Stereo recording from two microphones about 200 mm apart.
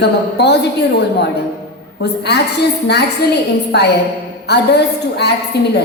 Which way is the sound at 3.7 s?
55° left (ahead or behind).